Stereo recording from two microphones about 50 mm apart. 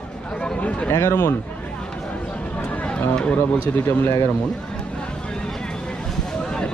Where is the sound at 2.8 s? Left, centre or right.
Centre.